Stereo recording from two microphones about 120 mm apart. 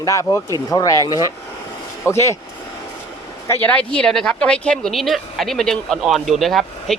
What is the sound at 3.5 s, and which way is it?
A woman's voice, 15° left (ahead or behind).